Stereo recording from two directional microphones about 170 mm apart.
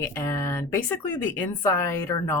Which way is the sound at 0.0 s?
15° left (ahead or behind).